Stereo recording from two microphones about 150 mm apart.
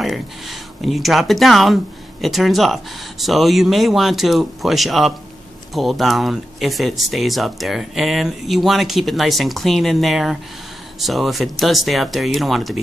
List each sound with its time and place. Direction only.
0.0 s speech: centre (ahead or behind)